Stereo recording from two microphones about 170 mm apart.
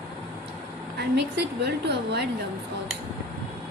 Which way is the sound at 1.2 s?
80° right.